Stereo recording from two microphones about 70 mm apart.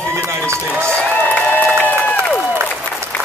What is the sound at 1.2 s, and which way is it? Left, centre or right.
Applause, left.